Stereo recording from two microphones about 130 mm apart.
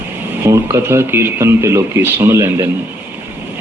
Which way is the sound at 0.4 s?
20° right (ahead or behind).